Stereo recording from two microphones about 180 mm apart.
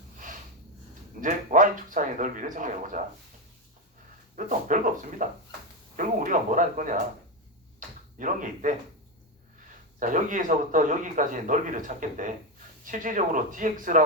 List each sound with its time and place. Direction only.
1.2 s a man's voice: 45° right (ahead or behind)
4.4 s a man's voice: 45° right (ahead or behind)
7.8 s a sound: 45° right (ahead or behind)
10.0 s a man's voice: 45° right (ahead or behind)